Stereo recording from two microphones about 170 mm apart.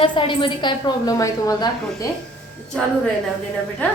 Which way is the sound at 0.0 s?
30° left (ahead or behind).